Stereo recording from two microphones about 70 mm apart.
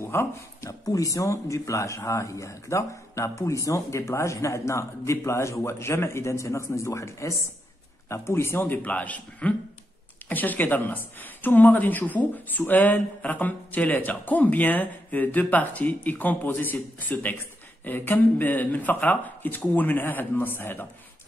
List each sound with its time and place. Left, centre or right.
0.0 s speech: left
0.7 s a woman's voice: left